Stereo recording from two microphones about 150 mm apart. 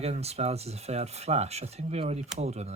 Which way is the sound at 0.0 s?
45° right (ahead or behind).